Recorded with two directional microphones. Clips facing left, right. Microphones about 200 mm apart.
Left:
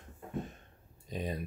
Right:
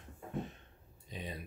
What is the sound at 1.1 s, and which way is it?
Speech, 45° left (ahead or behind).